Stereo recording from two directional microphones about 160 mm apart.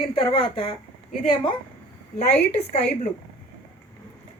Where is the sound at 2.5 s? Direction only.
40° left (ahead or behind).